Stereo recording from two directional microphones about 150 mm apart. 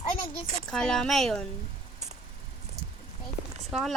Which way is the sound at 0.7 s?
5° left (ahead or behind).